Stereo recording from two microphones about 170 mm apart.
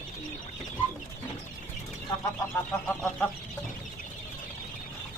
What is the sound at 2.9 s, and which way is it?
Chicken, 5° left (ahead or behind).